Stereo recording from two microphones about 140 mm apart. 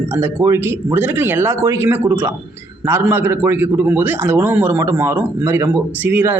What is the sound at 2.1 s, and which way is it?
Speech, 30° right (ahead or behind).